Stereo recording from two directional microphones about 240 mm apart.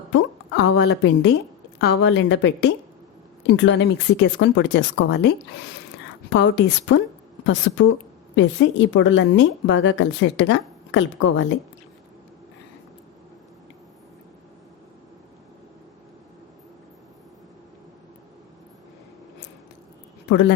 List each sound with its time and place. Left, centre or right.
0.1 s a woman's voice: left
6.3 s a woman's voice: left
20.2 s speech: left